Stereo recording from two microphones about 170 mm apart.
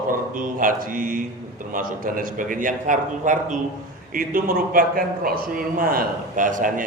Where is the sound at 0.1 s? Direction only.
55° right (ahead or behind).